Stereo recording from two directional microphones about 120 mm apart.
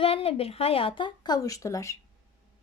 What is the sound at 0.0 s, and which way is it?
A woman's voice, 55° left (ahead or behind).